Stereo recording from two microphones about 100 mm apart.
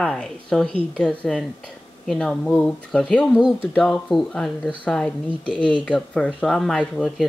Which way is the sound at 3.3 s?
10° right (ahead or behind).